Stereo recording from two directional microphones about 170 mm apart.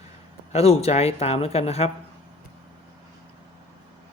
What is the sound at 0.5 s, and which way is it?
Speech, 40° left (ahead or behind).